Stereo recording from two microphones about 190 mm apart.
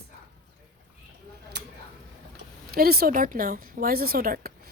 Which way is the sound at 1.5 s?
60° right (ahead or behind).